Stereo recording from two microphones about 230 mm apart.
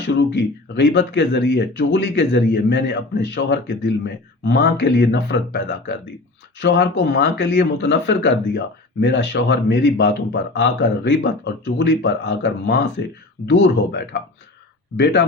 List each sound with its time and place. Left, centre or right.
0.0 s speech: left